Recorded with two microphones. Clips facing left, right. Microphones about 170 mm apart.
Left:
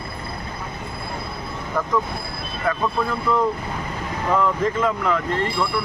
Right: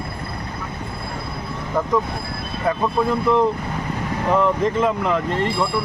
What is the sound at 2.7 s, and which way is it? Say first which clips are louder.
Speech: right 3 dB; 20° right (ahead or behind).